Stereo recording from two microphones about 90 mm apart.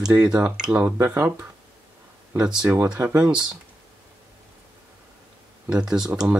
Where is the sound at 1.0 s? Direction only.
20° right (ahead or behind).